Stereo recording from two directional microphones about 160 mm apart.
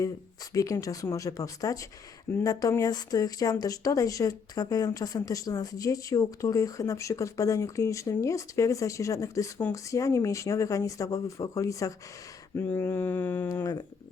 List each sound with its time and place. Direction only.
0.5 s speech: 20° left (ahead or behind)